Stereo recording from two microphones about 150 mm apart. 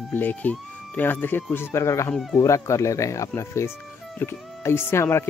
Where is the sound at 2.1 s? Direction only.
Centre (ahead or behind).